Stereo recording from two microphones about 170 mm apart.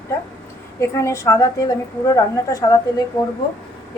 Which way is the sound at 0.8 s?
15° left (ahead or behind).